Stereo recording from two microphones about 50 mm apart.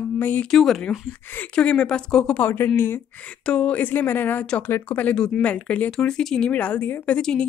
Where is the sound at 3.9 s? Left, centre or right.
Left.